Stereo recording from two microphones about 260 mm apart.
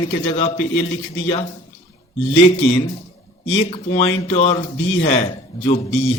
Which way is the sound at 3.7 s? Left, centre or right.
Left.